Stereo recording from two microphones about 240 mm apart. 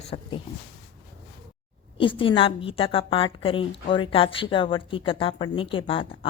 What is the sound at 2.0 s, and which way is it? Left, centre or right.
A woman's voice, left.